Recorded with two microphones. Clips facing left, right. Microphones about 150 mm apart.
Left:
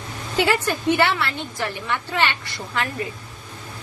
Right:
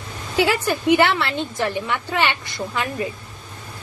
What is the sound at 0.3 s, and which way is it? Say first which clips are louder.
A woman's voice: right 1 dB; 10° right (ahead or behind).